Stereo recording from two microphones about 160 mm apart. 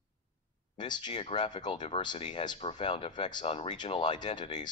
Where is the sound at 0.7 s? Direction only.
30° left (ahead or behind).